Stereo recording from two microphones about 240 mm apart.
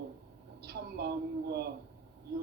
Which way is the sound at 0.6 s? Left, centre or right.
Right.